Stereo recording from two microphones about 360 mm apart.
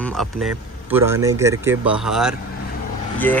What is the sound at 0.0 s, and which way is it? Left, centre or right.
Speech, centre.